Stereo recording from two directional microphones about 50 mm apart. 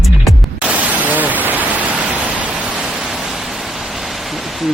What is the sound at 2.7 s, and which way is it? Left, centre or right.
Pink noise, centre.